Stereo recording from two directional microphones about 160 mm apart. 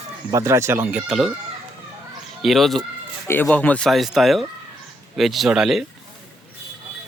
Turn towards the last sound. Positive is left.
turn(degrees=-5)  # may be behind; listen again after turning